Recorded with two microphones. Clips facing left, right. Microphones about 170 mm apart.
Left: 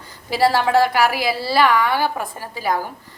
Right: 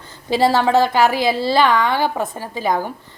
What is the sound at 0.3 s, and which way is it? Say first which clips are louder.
A woman's voice: right 2 dB; 25° right (ahead or behind).